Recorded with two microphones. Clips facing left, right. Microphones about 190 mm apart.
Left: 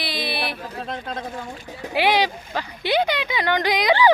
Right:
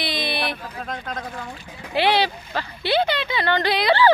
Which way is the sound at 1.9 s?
10° left (ahead or behind).